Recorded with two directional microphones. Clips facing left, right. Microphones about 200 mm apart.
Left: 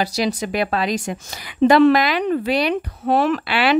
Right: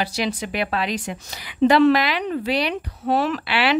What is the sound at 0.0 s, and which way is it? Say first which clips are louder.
Speech: left 3 dB; 40° left (ahead or behind).